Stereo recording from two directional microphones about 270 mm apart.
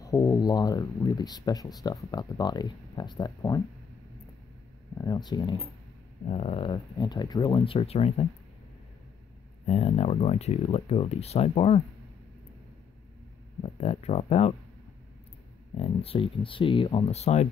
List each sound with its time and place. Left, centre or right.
0.0 s speech: centre
4.9 s speech: centre
9.7 s speech: left
13.6 s speech: left
15.8 s speech: left